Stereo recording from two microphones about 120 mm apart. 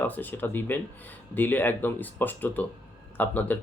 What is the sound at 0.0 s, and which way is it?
Speech, 15° left (ahead or behind).